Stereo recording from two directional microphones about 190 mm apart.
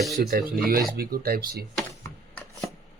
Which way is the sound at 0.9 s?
50° right (ahead or behind).